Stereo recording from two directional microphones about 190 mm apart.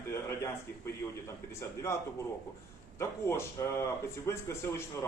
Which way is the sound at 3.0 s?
15° left (ahead or behind).